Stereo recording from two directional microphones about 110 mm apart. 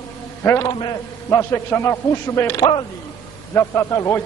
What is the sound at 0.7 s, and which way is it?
Speech, 45° left (ahead or behind).